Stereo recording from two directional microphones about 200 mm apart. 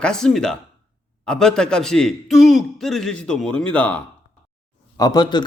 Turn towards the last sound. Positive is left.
turn(degrees=20)  # may be behind; listen again after turning